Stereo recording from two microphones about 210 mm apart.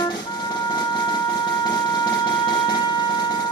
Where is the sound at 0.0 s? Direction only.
20° left (ahead or behind).